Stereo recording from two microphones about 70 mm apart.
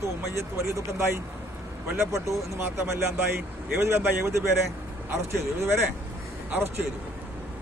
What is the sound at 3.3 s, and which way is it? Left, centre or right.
Speech, right.